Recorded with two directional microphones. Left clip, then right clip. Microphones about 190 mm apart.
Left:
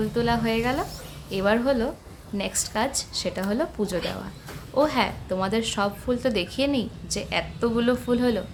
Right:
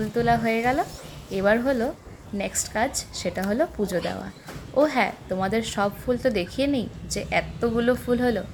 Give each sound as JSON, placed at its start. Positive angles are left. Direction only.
{"t": 0.1, "sound": "a woman's voice", "side_deg": -20}